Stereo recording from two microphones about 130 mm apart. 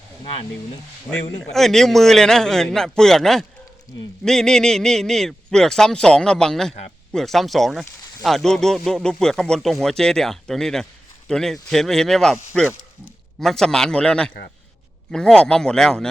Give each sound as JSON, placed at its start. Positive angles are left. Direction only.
{"t": 0.3, "sound": "speech", "side_deg": 45}
{"t": 1.5, "sound": "speech", "side_deg": 0}